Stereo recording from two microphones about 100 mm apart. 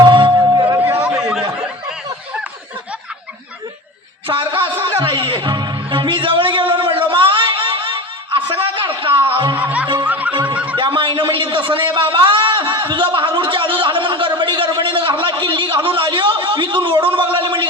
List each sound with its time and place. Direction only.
0.0 s music: 50° right (ahead or behind)
0.4 s music: 40° right (ahead or behind)
1.0 s a sound: 5° right (ahead or behind)
4.3 s music: 55° right (ahead or behind)
9.6 s music: 15° right (ahead or behind)
10.4 s snicker: 15° right (ahead or behind)
10.8 s a sound: 55° right (ahead or behind)
17.3 s gargling: 55° right (ahead or behind)